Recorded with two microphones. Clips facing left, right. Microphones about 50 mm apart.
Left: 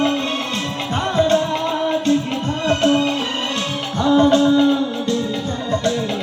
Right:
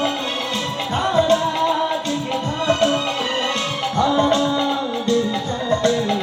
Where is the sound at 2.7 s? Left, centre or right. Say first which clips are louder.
Left 2 dB; left.